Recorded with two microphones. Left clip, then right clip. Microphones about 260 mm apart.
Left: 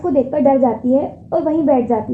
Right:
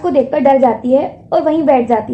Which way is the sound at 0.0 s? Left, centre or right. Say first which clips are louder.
Right 3 dB; right.